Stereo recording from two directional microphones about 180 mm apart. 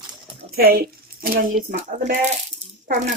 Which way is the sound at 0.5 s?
60° right (ahead or behind).